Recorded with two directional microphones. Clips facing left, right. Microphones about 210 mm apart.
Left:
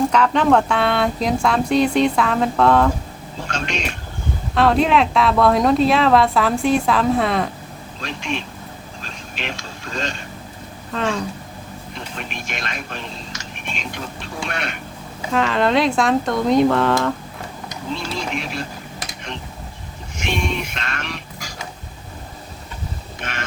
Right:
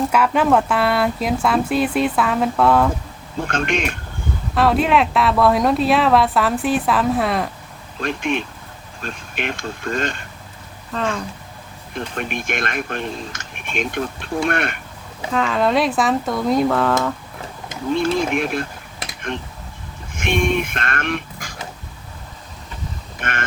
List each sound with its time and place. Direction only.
0.1 s speech: 5° right (ahead or behind)
3.4 s speech: 55° right (ahead or behind)
4.5 s speech: 5° right (ahead or behind)
8.0 s speech: 55° right (ahead or behind)
10.9 s speech: centre (ahead or behind)
11.9 s speech: 55° right (ahead or behind)
15.3 s speech: centre (ahead or behind)
17.9 s speech: 50° right (ahead or behind)
20.1 s music: 55° right (ahead or behind)
23.2 s speech: 55° right (ahead or behind)